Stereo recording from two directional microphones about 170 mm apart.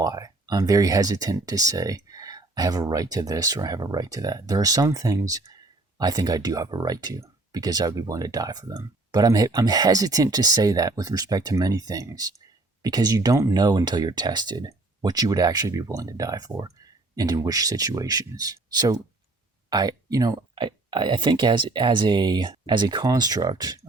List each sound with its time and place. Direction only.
0.0 s speech: 20° right (ahead or behind)